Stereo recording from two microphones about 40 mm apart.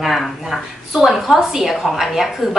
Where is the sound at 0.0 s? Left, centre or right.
Centre.